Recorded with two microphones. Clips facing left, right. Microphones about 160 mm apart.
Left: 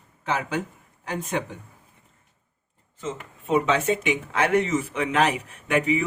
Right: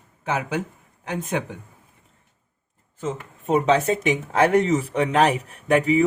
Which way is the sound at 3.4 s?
40° right (ahead or behind).